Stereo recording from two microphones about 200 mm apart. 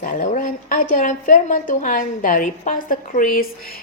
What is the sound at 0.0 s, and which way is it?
A woman's voice, 40° left (ahead or behind).